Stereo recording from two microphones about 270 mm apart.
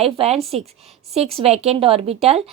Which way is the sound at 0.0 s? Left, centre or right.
Right.